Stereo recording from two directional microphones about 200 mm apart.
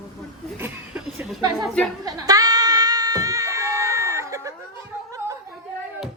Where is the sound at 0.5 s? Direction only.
10° right (ahead or behind).